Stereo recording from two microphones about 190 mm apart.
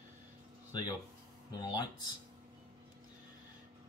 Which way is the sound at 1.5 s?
20° left (ahead or behind).